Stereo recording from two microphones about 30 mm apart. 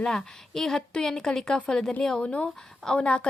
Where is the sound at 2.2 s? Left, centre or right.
Left.